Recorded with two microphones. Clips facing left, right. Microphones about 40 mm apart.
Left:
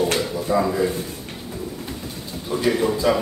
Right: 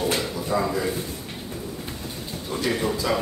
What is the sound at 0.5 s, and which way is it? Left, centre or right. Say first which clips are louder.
Speech: left 4 dB; centre.